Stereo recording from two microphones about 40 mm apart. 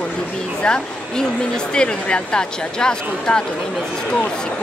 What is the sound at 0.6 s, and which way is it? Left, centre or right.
Speech, left.